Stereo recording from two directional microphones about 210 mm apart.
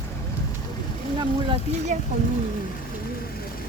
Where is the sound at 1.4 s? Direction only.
25° right (ahead or behind).